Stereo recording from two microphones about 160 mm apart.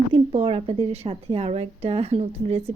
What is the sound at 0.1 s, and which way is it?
A woman's voice, 35° right (ahead or behind).